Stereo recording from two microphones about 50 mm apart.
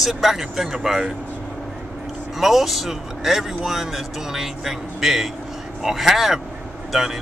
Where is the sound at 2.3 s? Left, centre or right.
Centre.